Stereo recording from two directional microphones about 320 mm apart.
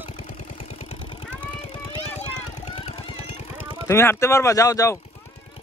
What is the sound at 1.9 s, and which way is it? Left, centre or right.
Vehicle, centre.